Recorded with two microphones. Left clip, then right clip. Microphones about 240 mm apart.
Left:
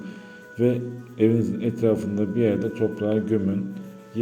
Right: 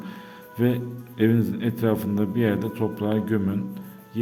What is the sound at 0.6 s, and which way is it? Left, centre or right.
A man's voice, right.